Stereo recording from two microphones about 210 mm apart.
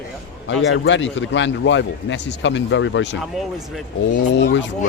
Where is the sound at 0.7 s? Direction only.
60° left (ahead or behind).